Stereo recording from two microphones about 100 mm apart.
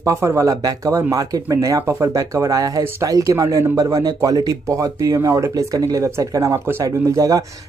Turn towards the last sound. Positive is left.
turn(degrees=-35)  # may be behind; listen again after turning